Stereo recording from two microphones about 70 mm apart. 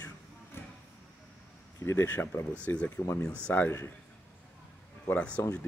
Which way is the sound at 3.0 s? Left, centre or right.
Left.